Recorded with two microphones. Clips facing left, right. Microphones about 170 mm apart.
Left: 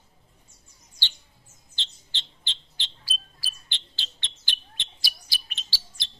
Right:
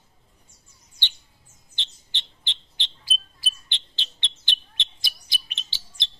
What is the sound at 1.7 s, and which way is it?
Bird, 15° right (ahead or behind).